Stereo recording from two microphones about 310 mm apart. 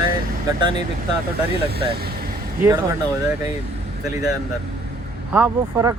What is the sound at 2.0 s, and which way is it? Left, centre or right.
Vehicle, right.